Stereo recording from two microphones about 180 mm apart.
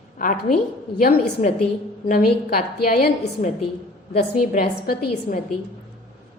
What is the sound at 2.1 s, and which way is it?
A woman's voice, 55° left (ahead or behind).